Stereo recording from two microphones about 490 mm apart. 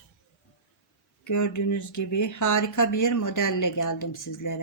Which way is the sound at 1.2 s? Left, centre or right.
Left.